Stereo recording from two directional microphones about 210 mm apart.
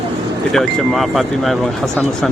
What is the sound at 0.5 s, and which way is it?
Speech, centre (ahead or behind).